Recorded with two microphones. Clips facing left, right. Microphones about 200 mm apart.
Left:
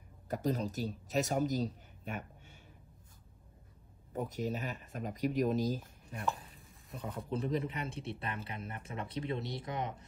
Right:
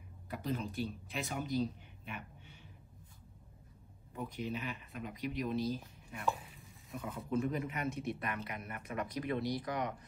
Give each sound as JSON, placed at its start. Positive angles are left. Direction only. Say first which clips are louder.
{"t": 0.3, "sound": "speech", "louder": "left 4 dB", "side_deg": 40}
{"t": 4.1, "sound": "speech", "louder": "left 4 dB", "side_deg": 45}
{"t": 6.2, "sound": "stir", "louder": "right 1 dB", "side_deg": 0}
{"t": 7.3, "sound": "speech", "louder": "even", "side_deg": 35}